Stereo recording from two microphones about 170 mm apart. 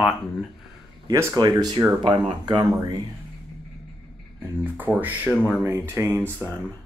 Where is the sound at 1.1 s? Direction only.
20° right (ahead or behind).